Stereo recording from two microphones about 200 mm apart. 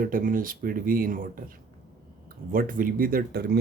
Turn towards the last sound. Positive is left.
turn(degrees=-50)  # may be behind; listen again after turning